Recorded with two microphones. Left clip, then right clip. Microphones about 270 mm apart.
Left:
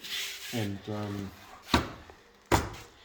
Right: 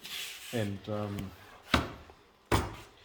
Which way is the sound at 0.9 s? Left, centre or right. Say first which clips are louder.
Right 3 dB; centre.